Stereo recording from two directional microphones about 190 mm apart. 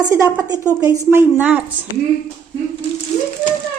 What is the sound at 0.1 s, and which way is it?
A woman's voice, 15° right (ahead or behind).